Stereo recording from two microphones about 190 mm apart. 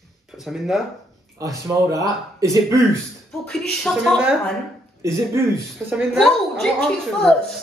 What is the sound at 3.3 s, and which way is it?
Speech, 5° left (ahead or behind).